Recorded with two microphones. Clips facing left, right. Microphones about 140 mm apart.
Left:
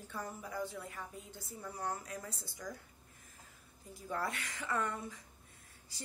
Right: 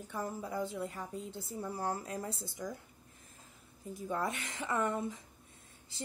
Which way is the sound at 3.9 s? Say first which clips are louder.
Right 3 dB; 20° right (ahead or behind).